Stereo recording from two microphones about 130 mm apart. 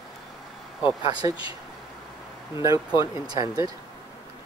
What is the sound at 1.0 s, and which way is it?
Speech, 30° right (ahead or behind).